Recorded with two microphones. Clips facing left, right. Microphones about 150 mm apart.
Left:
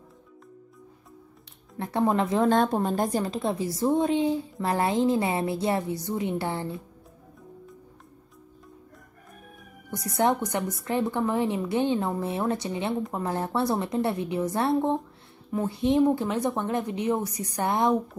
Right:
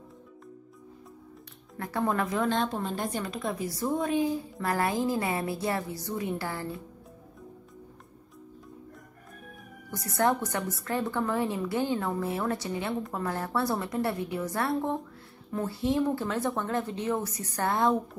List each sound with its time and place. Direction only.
1.8 s a woman's voice: 25° left (ahead or behind)
2.5 s a woman's voice: 45° left (ahead or behind); by 6.8 s 25° left (ahead or behind)
9.8 s a woman's voice: 20° left (ahead or behind)